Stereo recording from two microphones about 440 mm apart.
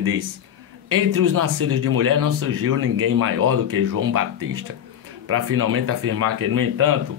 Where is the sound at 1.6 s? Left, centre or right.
Right.